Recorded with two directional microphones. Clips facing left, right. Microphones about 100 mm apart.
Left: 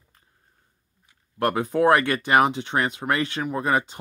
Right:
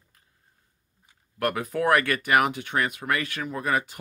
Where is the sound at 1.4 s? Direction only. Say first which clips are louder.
Left 5 dB; 25° left (ahead or behind).